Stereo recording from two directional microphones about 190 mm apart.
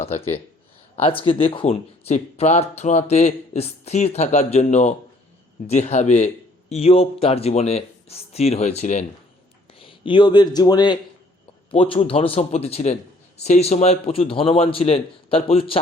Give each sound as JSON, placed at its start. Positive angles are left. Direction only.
{"t": 0.0, "sound": "speech", "side_deg": 35}